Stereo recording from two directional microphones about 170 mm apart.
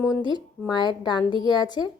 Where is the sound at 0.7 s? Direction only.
25° left (ahead or behind).